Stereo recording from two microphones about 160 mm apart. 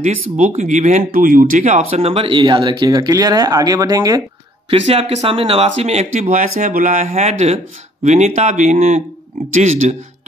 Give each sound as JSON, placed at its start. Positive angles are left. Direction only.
{"t": 0.0, "sound": "speech", "side_deg": -45}
{"t": 4.6, "sound": "speech", "side_deg": -40}